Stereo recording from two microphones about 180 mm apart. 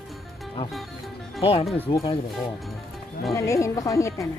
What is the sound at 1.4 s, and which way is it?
Speech, 30° left (ahead or behind).